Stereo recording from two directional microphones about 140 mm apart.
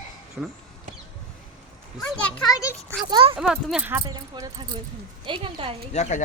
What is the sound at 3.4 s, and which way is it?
Speech, 5° right (ahead or behind).